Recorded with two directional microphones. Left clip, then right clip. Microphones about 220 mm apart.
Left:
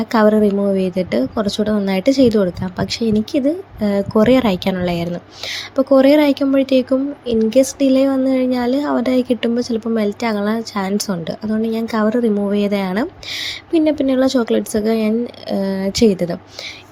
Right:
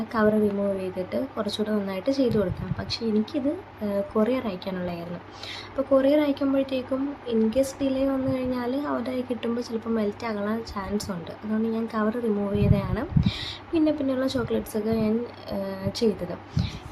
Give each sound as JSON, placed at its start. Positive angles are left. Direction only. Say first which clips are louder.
{"t": 0.1, "sound": "speech", "louder": "left 9 dB", "side_deg": 30}